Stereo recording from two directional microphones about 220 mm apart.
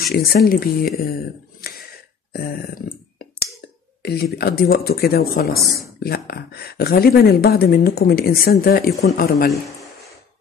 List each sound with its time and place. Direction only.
0.0 s speech: 45° left (ahead or behind)
1.6 s a sound: 45° left (ahead or behind)
2.3 s burping: 45° left (ahead or behind)
4.0 s speech: 45° left (ahead or behind)